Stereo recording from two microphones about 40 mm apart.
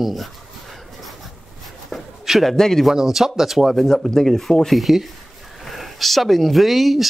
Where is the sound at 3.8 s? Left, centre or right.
Centre.